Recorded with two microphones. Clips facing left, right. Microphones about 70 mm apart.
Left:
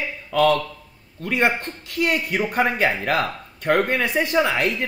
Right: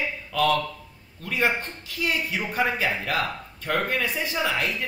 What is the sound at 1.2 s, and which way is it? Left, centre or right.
A man's voice, left.